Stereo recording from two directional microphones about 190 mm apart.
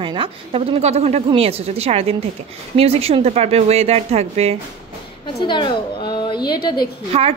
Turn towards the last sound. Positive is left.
turn(degrees=-30)  # may be behind; listen again after turning